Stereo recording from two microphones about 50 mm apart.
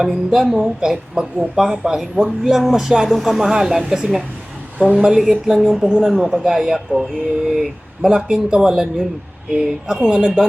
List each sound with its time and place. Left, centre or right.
0.0 s speech: centre